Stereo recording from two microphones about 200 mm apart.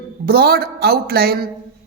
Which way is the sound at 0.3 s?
50° right (ahead or behind).